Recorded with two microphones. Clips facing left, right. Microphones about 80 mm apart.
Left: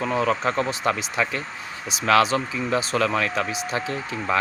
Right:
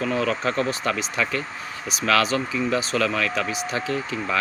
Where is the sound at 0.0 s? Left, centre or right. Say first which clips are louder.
Left 1 dB; left.